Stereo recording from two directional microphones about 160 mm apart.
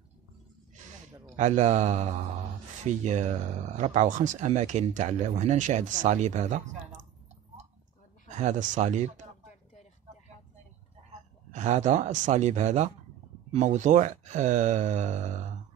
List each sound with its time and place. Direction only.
1.3 s speech: 45° right (ahead or behind)
8.3 s speech: 50° right (ahead or behind)
11.5 s speech: 50° right (ahead or behind)